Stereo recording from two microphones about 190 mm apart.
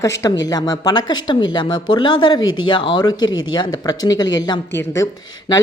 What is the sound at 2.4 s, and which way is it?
Speech, 90° left.